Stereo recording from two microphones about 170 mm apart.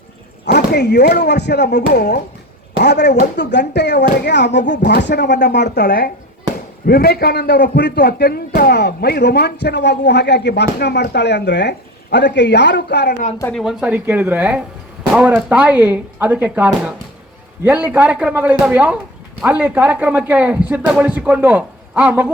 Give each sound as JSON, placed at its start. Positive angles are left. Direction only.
{"t": 0.4, "sound": "a man's voice", "side_deg": 75}
{"t": 3.3, "sound": "a man's voice", "side_deg": 90}
{"t": 13.5, "sound": "speech", "side_deg": 0}